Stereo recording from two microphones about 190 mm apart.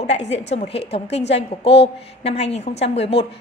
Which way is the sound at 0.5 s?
35° left (ahead or behind).